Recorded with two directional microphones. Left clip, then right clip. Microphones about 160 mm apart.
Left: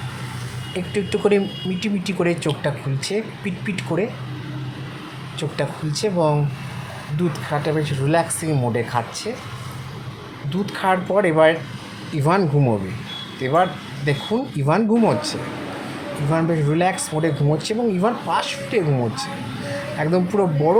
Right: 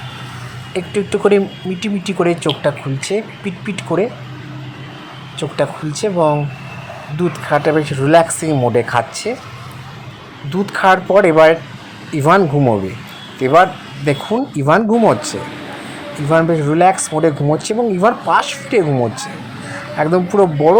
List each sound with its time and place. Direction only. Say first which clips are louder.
0.7 s speech: right 5 dB; 15° right (ahead or behind)
5.4 s speech: right 7 dB; 15° right (ahead or behind)
7.5 s speech: right 10 dB; 30° right (ahead or behind)
10.5 s speech: right 8 dB; 25° right (ahead or behind)